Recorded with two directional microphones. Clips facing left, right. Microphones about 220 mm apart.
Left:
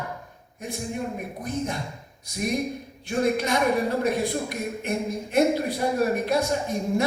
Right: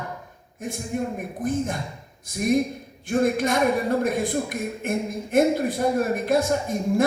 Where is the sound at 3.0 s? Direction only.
50° right (ahead or behind).